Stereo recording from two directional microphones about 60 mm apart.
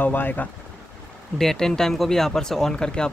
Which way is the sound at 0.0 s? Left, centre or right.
Left.